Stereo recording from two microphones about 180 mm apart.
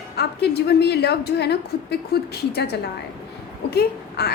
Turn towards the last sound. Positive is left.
turn(degrees=60)  # may be behind; listen again after turning